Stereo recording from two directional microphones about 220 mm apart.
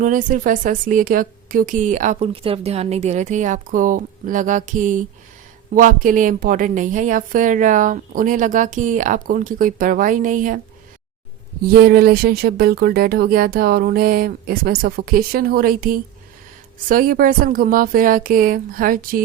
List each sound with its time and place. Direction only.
0.0 s speech: 35° right (ahead or behind)
11.7 s speech: 45° right (ahead or behind)